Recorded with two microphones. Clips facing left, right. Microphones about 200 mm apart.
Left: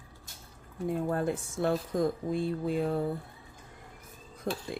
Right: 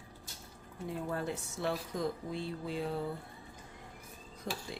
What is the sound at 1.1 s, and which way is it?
Speech, 50° left (ahead or behind).